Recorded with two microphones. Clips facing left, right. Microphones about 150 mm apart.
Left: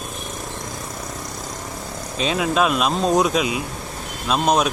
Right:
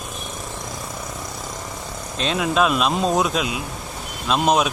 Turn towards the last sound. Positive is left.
turn(degrees=0)  # may be behind; listen again after turning